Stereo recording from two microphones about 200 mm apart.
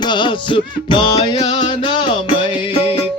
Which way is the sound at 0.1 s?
25° left (ahead or behind).